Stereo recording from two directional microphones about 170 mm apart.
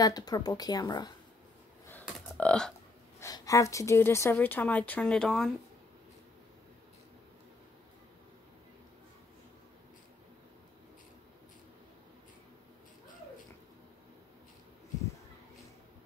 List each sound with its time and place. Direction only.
0.0 s speech: 20° left (ahead or behind)
1.9 s a sound: 10° left (ahead or behind)
3.2 s speech: 20° left (ahead or behind); by 5.6 s centre (ahead or behind)